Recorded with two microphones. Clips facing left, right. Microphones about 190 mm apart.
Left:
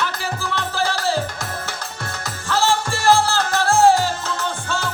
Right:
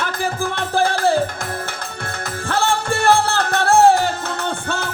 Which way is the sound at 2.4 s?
55° right (ahead or behind).